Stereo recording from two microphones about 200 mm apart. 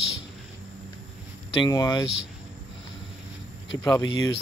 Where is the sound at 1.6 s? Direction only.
20° left (ahead or behind).